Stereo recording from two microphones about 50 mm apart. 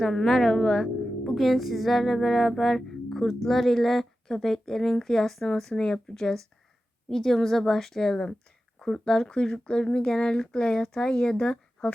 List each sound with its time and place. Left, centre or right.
0.0 s a woman's voice: centre